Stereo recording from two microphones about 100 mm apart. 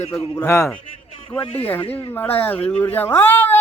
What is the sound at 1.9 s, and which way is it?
Speech, 20° left (ahead or behind).